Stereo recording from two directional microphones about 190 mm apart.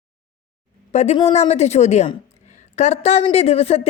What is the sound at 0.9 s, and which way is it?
A woman's voice, 35° left (ahead or behind).